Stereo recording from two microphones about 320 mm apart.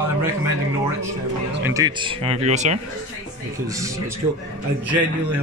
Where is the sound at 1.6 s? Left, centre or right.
Centre.